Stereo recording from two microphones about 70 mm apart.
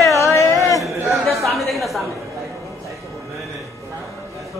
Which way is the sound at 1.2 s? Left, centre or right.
Centre.